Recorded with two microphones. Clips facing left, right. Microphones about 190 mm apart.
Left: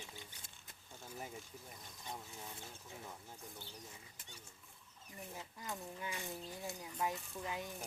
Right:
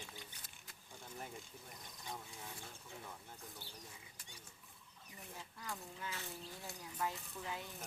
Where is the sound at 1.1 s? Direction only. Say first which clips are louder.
Left 2 dB; 10° left (ahead or behind).